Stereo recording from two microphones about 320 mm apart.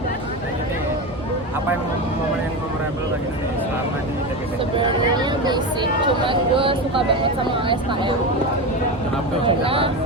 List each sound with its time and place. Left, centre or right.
4.8 s speech: centre
9.5 s speech: centre